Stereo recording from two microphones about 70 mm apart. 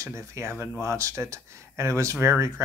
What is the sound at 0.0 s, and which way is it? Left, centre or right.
Speech, right.